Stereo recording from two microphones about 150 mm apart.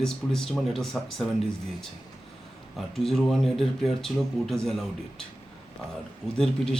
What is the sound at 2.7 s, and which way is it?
A man's voice, 5° left (ahead or behind).